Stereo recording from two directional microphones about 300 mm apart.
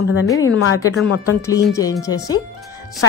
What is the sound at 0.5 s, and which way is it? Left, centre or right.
Speech, left.